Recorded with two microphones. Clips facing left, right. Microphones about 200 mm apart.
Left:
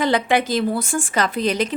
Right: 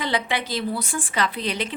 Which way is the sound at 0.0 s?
45° left (ahead or behind).